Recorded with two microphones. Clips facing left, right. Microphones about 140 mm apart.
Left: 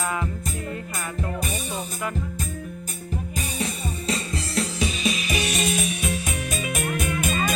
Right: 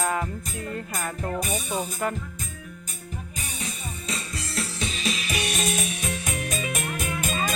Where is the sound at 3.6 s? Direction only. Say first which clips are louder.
Left 7 dB; 35° left (ahead or behind).